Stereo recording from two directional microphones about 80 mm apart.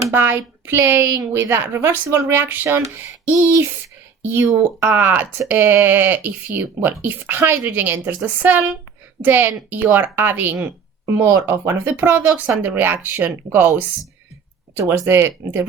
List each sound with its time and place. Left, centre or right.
0.1 s a woman's voice: right